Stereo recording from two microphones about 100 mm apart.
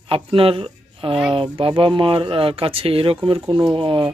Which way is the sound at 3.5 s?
50° right (ahead or behind).